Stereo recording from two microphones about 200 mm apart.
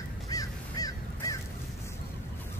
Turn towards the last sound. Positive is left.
turn(degrees=15)  # may be behind; listen again after turning